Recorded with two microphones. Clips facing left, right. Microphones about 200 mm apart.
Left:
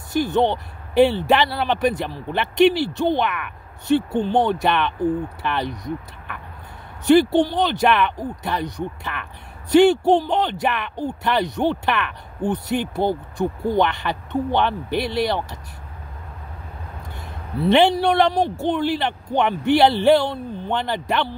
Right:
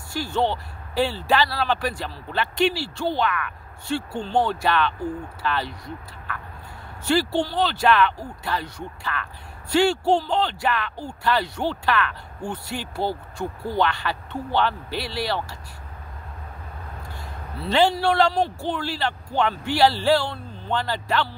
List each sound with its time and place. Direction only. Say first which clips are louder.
0.1 s speech: left 5 dB; 20° left (ahead or behind)
7.1 s speech: left 7 dB; 20° left (ahead or behind)
17.6 s speech: left 5 dB; 20° left (ahead or behind)